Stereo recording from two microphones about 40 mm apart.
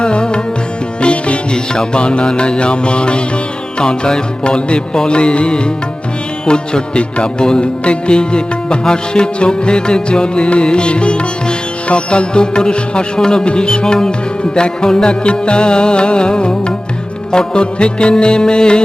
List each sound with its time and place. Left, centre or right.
0.0 s music: left